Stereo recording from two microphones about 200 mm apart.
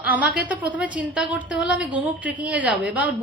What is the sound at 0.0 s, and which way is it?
A woman's voice, 5° right (ahead or behind).